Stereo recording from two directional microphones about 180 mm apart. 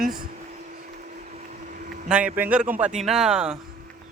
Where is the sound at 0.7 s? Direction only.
50° right (ahead or behind).